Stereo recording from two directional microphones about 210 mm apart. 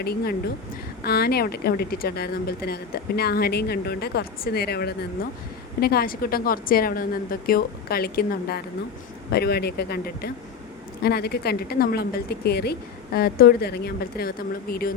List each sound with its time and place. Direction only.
0.0 s speech: 50° left (ahead or behind)